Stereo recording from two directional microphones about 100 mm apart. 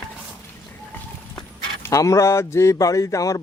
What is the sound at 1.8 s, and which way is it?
Speech, 35° left (ahead or behind).